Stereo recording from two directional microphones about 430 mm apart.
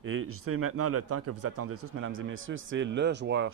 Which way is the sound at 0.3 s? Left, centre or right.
Right.